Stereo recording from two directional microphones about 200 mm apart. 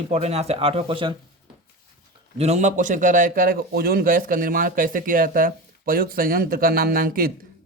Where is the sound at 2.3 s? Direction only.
35° right (ahead or behind).